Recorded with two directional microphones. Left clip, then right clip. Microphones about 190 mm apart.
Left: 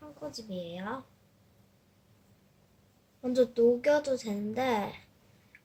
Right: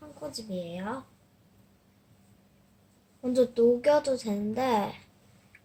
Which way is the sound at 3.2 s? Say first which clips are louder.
Right 2 dB; 5° right (ahead or behind).